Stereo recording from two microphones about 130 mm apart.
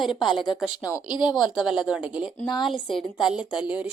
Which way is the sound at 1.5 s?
5° right (ahead or behind).